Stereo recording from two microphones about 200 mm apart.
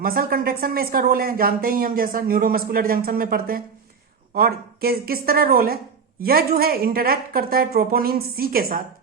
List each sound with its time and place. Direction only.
0.0 s speech: 45° right (ahead or behind)